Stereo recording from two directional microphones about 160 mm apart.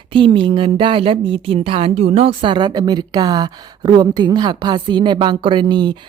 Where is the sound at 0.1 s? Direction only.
35° right (ahead or behind).